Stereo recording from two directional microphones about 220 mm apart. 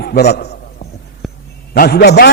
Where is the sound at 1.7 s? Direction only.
45° left (ahead or behind).